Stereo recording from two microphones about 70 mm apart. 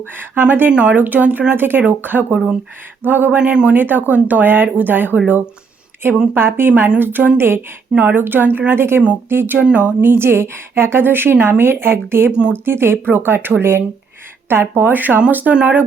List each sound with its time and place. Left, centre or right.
0.2 s speech: right
3.3 s speech: centre
3.8 s speech: right
6.3 s a woman's voice: right
9.6 s speech: centre
10.0 s a woman's voice: right
12.3 s speech: centre
12.6 s a woman's voice: right